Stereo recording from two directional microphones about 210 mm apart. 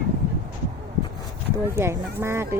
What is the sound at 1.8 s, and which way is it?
Speech, 10° right (ahead or behind).